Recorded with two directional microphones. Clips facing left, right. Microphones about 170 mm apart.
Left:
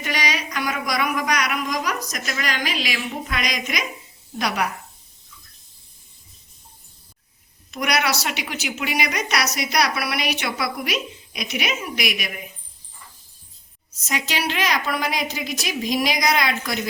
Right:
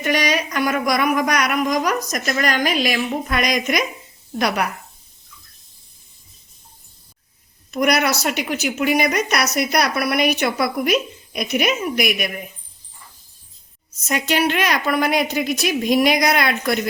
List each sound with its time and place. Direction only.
0.0 s a woman's voice: 50° right (ahead or behind)
7.7 s a woman's voice: 50° right (ahead or behind)
14.1 s a woman's voice: 55° right (ahead or behind)